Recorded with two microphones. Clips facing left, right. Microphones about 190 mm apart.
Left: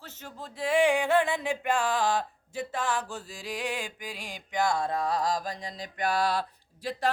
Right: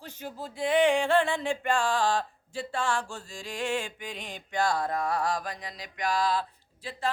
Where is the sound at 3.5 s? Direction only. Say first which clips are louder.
Right 2 dB; 5° left (ahead or behind).